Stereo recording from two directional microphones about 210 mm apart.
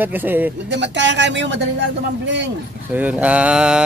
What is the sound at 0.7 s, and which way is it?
Speech, 55° right (ahead or behind).